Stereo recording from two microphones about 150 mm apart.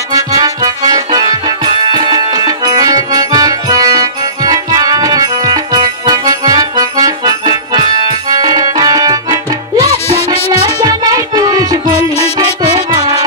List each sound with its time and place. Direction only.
0.1 s accordion: 25° right (ahead or behind)
1.9 s music: 30° right (ahead or behind)
9.8 s music: 45° left (ahead or behind)
10.8 s music: 25° right (ahead or behind)